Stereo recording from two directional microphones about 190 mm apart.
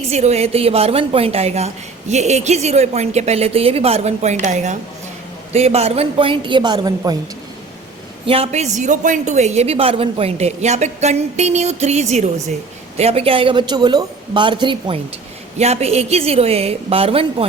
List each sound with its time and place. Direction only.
0.1 s a woman's voice: 35° right (ahead or behind)
8.3 s a woman's voice: 35° right (ahead or behind)